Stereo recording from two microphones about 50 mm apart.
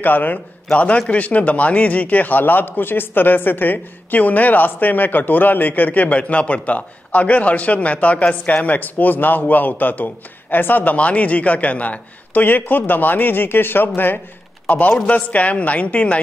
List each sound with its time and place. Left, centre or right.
0.0 s speech: left
0.7 s a man's voice: left
14.7 s a woman's voice: left